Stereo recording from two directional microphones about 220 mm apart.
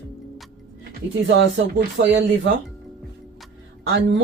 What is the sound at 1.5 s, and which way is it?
Speech, 55° right (ahead or behind).